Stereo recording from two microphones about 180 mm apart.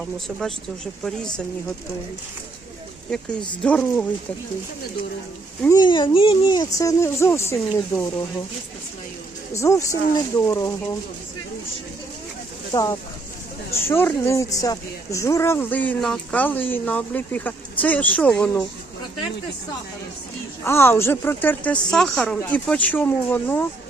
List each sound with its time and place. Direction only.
0.0 s speech: centre (ahead or behind)
3.6 s speech: 5° left (ahead or behind)
5.6 s speech: 20° left (ahead or behind)
9.6 s speech: 15° left (ahead or behind)
12.7 s speech: 20° left (ahead or behind)
20.7 s speech: 15° left (ahead or behind)